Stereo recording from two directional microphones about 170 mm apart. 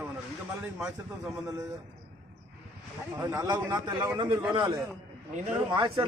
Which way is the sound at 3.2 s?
20° right (ahead or behind).